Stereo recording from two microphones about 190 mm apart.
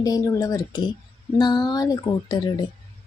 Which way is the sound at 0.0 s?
20° left (ahead or behind).